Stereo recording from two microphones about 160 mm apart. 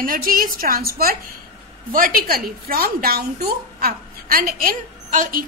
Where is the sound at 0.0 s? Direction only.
60° right (ahead or behind).